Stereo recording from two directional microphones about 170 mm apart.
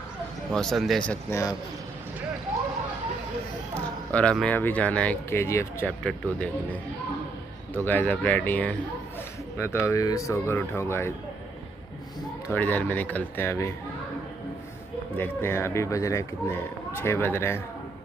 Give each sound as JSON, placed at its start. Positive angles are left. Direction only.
{"t": 0.5, "sound": "speech", "side_deg": 5}
{"t": 1.3, "sound": "a man's voice", "side_deg": 20}
{"t": 3.7, "sound": "speech", "side_deg": 5}
{"t": 12.5, "sound": "speech", "side_deg": 10}
{"t": 15.1, "sound": "speech", "side_deg": 15}